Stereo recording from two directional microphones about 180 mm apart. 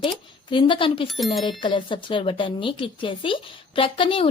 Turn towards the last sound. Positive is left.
turn(degrees=30)  # may be behind; listen again after turning